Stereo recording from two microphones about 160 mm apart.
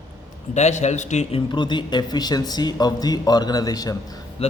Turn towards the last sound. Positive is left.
turn(degrees=40)  # may be behind; listen again after turning